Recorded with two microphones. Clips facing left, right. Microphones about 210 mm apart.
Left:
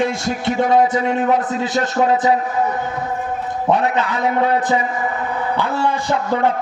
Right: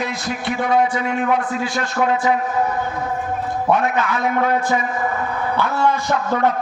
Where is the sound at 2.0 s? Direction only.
35° left (ahead or behind).